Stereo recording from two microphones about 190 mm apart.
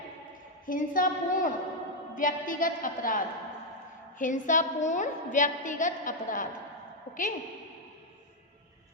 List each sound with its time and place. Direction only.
0.6 s a woman's voice: 45° left (ahead or behind)